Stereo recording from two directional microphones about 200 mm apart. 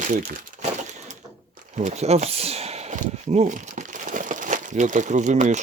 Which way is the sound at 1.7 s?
35° right (ahead or behind).